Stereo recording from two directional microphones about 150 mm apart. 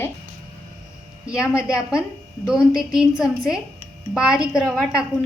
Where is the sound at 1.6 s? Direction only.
5° right (ahead or behind).